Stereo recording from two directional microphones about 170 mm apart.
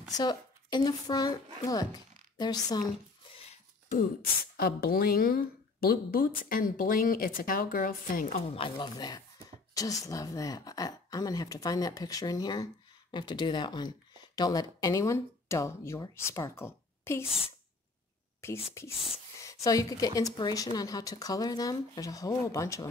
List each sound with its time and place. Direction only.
0.1 s speech: 25° left (ahead or behind)
4.6 s a woman's voice: 65° left (ahead or behind)
8.4 s a woman's voice: 30° left (ahead or behind); by 17.2 s 15° left (ahead or behind)
18.8 s a woman's voice: 15° left (ahead or behind)